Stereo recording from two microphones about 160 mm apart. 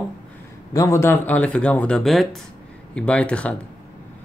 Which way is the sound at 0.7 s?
20° left (ahead or behind).